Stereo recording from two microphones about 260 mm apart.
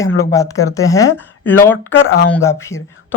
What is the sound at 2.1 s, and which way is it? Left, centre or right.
Speech, left.